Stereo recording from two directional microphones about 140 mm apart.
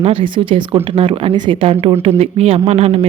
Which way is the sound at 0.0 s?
40° right (ahead or behind).